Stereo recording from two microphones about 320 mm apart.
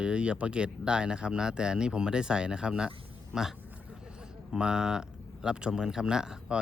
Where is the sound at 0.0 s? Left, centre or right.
Centre.